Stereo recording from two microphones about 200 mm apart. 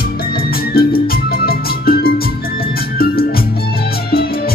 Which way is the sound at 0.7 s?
50° left (ahead or behind).